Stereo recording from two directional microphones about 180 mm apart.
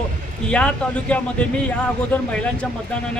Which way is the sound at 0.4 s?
5° left (ahead or behind).